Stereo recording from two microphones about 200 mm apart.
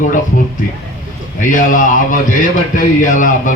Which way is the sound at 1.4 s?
40° left (ahead or behind).